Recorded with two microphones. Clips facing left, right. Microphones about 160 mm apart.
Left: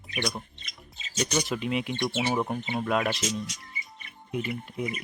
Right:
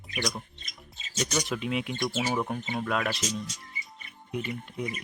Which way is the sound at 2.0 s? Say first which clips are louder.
Left 1 dB; 20° left (ahead or behind).